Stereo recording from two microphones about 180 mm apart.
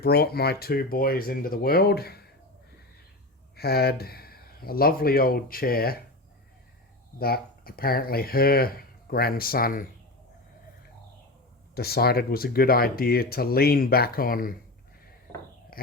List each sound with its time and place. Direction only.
0.0 s speech: 60° left (ahead or behind)
3.5 s speech: 60° left (ahead or behind)
7.2 s speech: 60° left (ahead or behind)
11.7 s speech: 60° left (ahead or behind)
15.7 s a sound: 55° left (ahead or behind)